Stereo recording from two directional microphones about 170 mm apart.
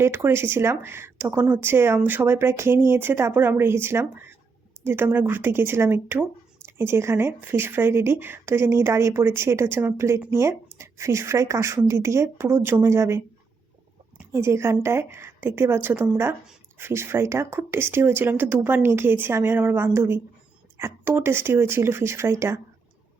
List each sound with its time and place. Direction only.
0.0 s speech: 15° right (ahead or behind)
14.3 s speech: 15° right (ahead or behind)